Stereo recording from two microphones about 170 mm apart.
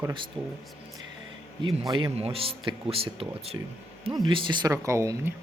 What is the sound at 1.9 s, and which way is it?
Speech, 20° right (ahead or behind).